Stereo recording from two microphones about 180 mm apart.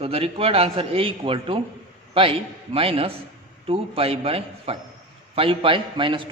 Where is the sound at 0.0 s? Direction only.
30° right (ahead or behind).